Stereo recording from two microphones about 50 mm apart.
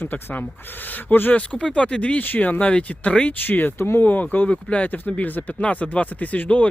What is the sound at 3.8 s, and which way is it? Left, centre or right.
Speech, left.